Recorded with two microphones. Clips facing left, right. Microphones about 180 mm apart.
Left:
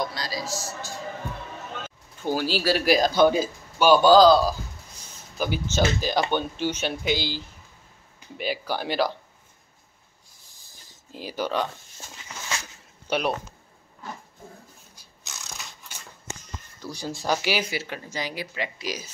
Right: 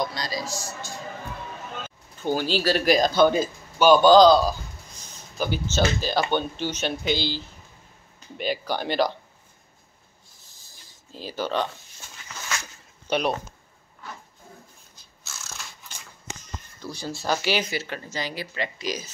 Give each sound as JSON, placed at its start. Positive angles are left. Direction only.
{"t": 0.0, "sound": "speech", "side_deg": 5}
{"t": 2.2, "sound": "speech", "side_deg": 5}
{"t": 10.6, "sound": "writing", "side_deg": 15}
{"t": 12.0, "sound": "a sound", "side_deg": 30}
{"t": 13.1, "sound": "speech", "side_deg": 5}
{"t": 15.0, "sound": "a sound", "side_deg": 15}
{"t": 15.9, "sound": "shuffle", "side_deg": 10}
{"t": 16.8, "sound": "speech", "side_deg": 10}